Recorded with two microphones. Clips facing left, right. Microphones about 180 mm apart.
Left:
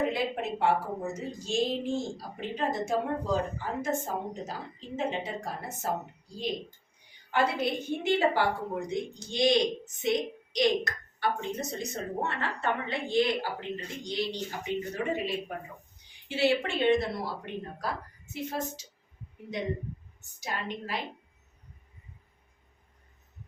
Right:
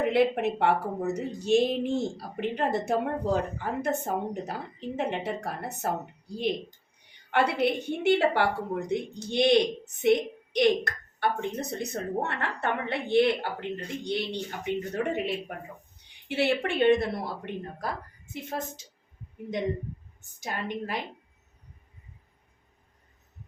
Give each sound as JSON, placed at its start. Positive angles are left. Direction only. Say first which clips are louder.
{"t": 0.0, "sound": "a woman's voice", "louder": "right 6 dB", "side_deg": -65}
{"t": 7.3, "sound": "a woman's voice", "louder": "right 3 dB", "side_deg": -65}
{"t": 20.4, "sound": "a woman's voice", "louder": "right 3 dB", "side_deg": -50}